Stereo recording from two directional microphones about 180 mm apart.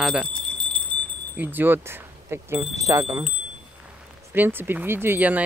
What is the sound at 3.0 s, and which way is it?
Speech, 5° right (ahead or behind).